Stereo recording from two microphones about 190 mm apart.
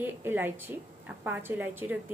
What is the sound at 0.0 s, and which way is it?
A woman's voice, 10° right (ahead or behind).